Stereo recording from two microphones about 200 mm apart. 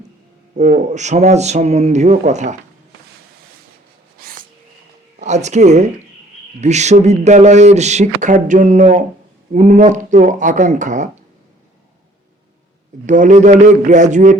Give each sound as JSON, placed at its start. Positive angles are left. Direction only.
{"t": 0.5, "sound": "speech", "side_deg": -35}
{"t": 4.2, "sound": "a sound", "side_deg": -45}
{"t": 5.2, "sound": "speech", "side_deg": -35}
{"t": 13.1, "sound": "speech", "side_deg": -40}